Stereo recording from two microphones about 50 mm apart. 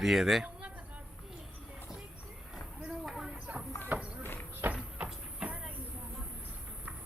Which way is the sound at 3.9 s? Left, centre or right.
Right.